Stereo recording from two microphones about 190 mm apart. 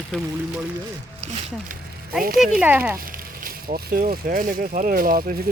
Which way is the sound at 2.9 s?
50° right (ahead or behind).